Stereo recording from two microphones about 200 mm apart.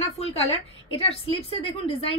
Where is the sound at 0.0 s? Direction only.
30° left (ahead or behind).